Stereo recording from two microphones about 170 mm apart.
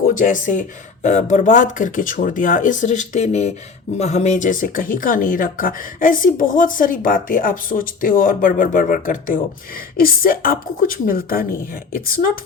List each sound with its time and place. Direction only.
0.1 s a woman's voice: 50° left (ahead or behind)